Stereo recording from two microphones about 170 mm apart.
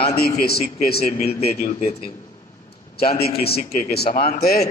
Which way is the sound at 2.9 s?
65° left (ahead or behind).